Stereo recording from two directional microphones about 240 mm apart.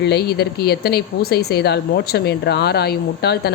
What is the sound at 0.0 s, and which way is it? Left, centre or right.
Speech, left.